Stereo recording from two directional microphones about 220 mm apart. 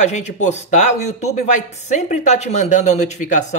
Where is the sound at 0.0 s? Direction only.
30° left (ahead or behind).